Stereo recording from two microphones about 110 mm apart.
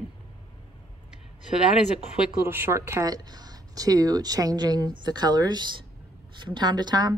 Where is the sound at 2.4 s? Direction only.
20° right (ahead or behind).